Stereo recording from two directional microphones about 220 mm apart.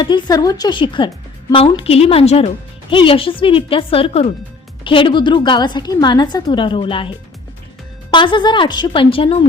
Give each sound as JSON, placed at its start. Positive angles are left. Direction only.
{"t": 0.0, "sound": "a woman's voice", "side_deg": 20}